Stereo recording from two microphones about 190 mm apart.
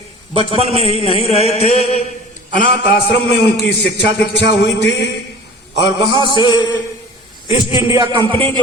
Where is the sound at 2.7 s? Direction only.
60° left (ahead or behind).